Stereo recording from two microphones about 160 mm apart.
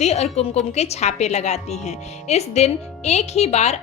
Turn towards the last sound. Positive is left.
turn(degrees=45)  # may be behind; listen again after turning